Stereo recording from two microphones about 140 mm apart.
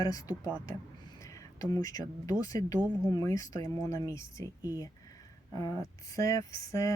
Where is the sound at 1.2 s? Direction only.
25° left (ahead or behind).